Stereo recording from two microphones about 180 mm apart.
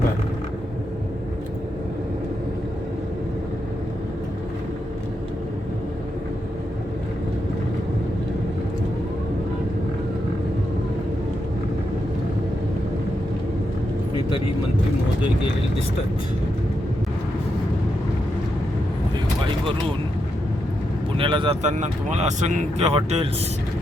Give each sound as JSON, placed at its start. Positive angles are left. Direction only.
{"t": 21.2, "sound": "vehicle", "side_deg": -30}
{"t": 21.6, "sound": "speech", "side_deg": -40}